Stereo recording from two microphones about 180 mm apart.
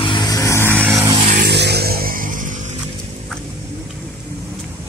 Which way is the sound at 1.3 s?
60° right (ahead or behind).